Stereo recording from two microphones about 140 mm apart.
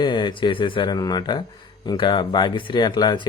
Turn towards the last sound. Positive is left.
turn(degrees=30)  # may be behind; listen again after turning